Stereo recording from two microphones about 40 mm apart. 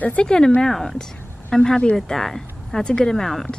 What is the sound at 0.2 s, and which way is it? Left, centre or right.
Speech, left.